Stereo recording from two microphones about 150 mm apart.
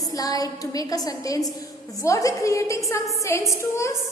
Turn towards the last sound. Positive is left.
turn(degrees=20)  # may be behind; listen again after turning